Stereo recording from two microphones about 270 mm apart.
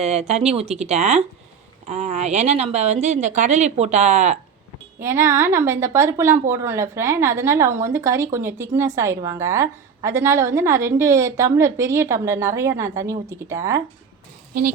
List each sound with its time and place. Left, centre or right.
0.0 s speech: right
4.9 s a woman's voice: centre